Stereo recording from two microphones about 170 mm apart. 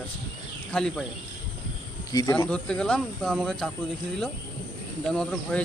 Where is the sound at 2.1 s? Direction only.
20° left (ahead or behind).